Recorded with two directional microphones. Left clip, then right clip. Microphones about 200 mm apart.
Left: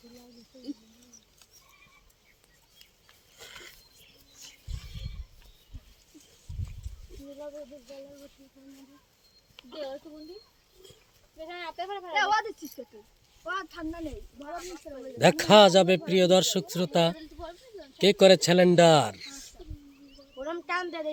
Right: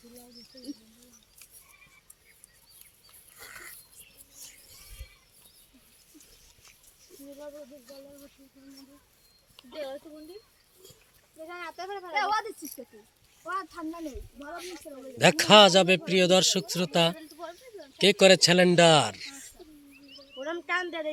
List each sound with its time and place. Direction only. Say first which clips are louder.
9.7 s speech: even; 25° right (ahead or behind)
11.4 s speech: left 2 dB; 40° right (ahead or behind)
14.0 s speech: even; 35° right (ahead or behind)
15.2 s speech: even; centre (ahead or behind)
17.2 s a sound: right 1 dB; 30° right (ahead or behind)
18.0 s speech: even; 5° left (ahead or behind)
20.3 s a sound: right 1 dB; 30° right (ahead or behind)